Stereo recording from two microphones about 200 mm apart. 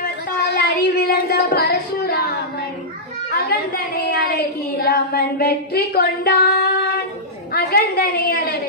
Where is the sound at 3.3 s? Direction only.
55° left (ahead or behind).